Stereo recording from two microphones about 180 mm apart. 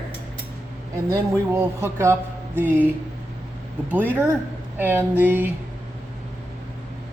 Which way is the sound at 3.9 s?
10° right (ahead or behind).